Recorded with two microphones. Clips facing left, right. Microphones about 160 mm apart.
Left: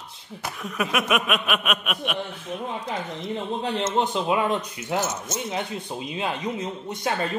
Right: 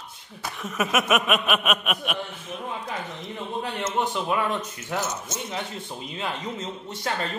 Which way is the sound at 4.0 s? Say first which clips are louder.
Left 1 dB; 20° left (ahead or behind).